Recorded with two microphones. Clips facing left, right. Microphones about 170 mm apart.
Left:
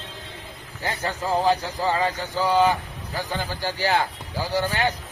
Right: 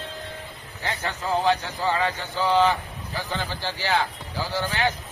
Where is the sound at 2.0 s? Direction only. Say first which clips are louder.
Left 1 dB; 10° left (ahead or behind).